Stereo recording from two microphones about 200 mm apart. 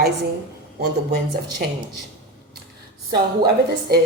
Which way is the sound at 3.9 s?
50° right (ahead or behind).